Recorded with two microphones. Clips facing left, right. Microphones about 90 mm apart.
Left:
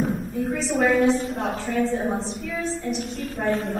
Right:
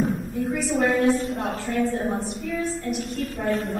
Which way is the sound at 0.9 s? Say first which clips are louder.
Left 1 dB; 20° left (ahead or behind).